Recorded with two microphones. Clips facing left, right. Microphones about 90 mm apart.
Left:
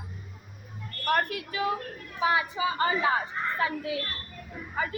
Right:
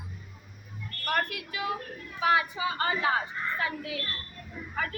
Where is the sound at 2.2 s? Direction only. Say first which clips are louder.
Even; 25° left (ahead or behind).